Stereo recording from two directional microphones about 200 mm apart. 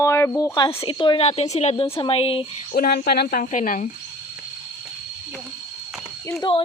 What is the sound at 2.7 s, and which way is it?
Speech, 50° left (ahead or behind).